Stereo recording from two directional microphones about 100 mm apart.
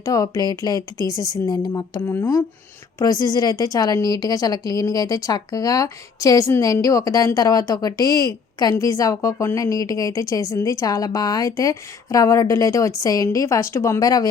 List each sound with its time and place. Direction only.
0.0 s a woman's voice: 35° left (ahead or behind)
2.0 s speech: 25° left (ahead or behind)
3.0 s a woman's voice: 40° left (ahead or behind)